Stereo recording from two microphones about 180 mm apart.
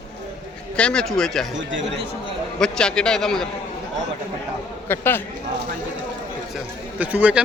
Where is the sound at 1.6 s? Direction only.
90° right.